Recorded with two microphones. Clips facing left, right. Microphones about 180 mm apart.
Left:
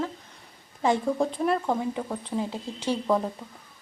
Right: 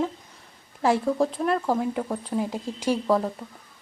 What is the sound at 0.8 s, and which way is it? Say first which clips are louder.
Speech: right 2 dB; 5° right (ahead or behind).